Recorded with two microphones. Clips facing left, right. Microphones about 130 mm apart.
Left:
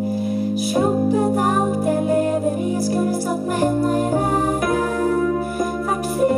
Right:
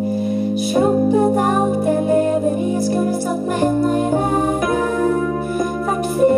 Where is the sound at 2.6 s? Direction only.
25° right (ahead or behind).